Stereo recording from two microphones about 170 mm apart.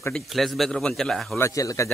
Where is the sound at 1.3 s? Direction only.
15° left (ahead or behind).